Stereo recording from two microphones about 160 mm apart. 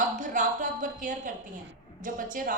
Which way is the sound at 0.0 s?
55° right (ahead or behind).